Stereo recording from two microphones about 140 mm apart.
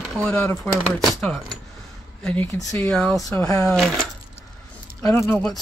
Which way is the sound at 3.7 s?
Centre (ahead or behind).